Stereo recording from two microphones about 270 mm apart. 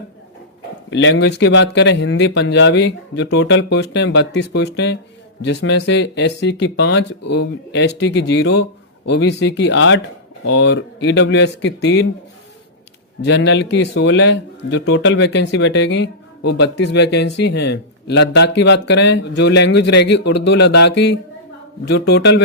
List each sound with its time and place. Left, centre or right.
0.9 s speech: left
13.2 s speech: left